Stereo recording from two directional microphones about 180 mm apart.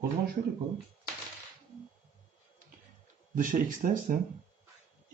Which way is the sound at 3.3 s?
45° right (ahead or behind).